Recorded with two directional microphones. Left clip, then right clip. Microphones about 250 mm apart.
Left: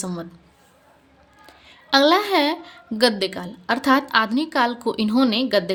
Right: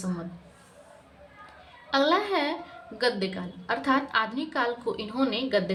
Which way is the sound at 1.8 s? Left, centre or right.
Left.